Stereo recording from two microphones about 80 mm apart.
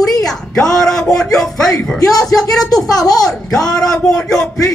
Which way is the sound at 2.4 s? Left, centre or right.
Left.